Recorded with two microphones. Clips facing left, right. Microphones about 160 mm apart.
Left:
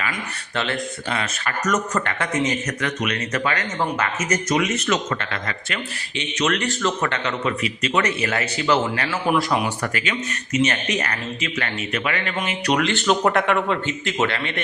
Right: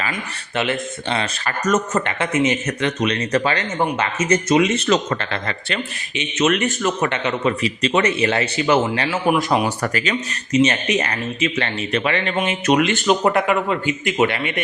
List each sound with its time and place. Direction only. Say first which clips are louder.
0.0 s speech: right 2 dB; 20° right (ahead or behind)
1.1 s speech: right 3 dB; 30° right (ahead or behind)
9.6 s speech: right 4 dB; 40° right (ahead or behind)
10.6 s speech: right 4 dB; 25° right (ahead or behind)